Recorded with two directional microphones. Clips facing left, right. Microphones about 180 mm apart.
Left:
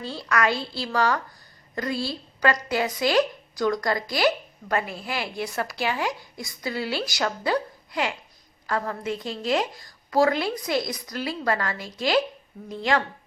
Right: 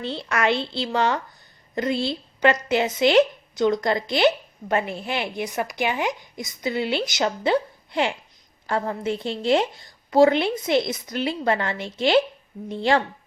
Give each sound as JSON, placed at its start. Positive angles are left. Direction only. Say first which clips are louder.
{"t": 0.0, "sound": "a woman's voice", "louder": "right 1 dB", "side_deg": -25}